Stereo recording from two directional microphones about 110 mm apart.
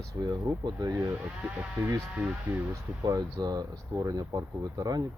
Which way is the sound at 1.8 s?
25° right (ahead or behind).